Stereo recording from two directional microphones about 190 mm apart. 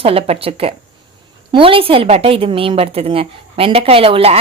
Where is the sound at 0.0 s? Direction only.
30° right (ahead or behind).